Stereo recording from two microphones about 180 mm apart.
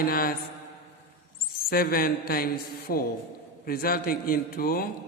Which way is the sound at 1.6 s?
55° left (ahead or behind).